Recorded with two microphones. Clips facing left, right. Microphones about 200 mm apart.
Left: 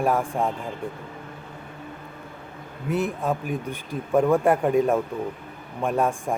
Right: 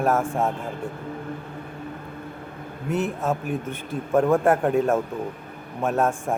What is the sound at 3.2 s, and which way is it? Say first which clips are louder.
Speech: right 1 dB; 5° right (ahead or behind).